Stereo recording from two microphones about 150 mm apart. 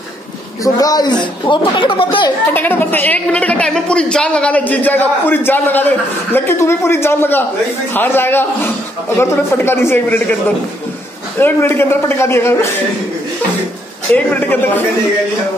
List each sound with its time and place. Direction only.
0.7 s speech: 25° left (ahead or behind)
2.5 s a woman's voice: 15° left (ahead or behind)
11.3 s a woman's voice: 15° left (ahead or behind)
14.1 s a woman's voice: 10° left (ahead or behind)